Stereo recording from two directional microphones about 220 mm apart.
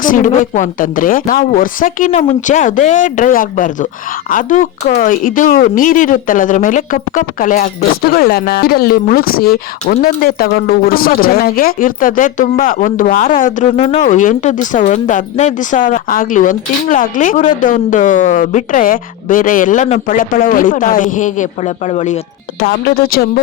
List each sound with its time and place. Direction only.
0.0 s speech: 35° left (ahead or behind)
22.6 s a woman's voice: 45° left (ahead or behind)